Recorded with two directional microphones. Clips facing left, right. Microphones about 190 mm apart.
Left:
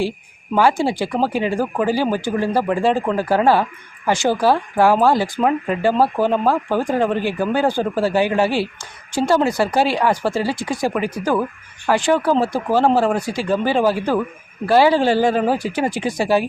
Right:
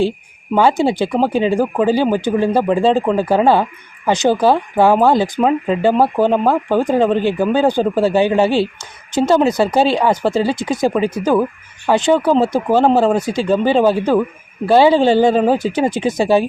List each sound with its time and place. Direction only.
0.5 s speech: 20° right (ahead or behind)